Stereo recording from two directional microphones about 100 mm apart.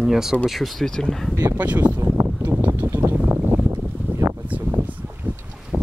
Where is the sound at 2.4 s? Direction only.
15° right (ahead or behind).